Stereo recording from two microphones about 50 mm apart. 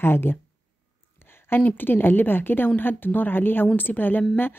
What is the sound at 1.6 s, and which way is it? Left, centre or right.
A woman's voice, left.